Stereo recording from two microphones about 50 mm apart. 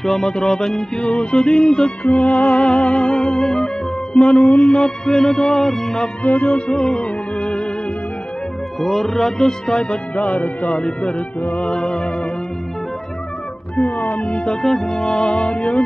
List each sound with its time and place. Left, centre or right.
0.0 s music: centre
2.1 s speech: left
2.6 s music: centre
6.2 s music: left
6.5 s music: centre
8.8 s a man's voice: centre
9.7 s music: centre
10.2 s speech: left
10.6 s speech: centre
11.5 s music: centre
13.7 s speech: centre
14.2 s music: centre